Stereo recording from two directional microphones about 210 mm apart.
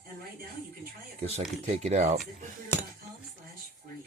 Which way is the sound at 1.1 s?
30° right (ahead or behind).